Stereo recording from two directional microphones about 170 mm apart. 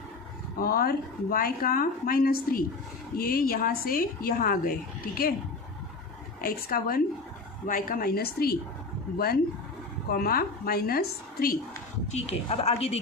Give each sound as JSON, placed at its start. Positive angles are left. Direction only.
{"t": 0.6, "sound": "a woman's voice", "side_deg": 60}
{"t": 6.4, "sound": "a woman's voice", "side_deg": 60}
{"t": 12.1, "sound": "a woman's voice", "side_deg": 40}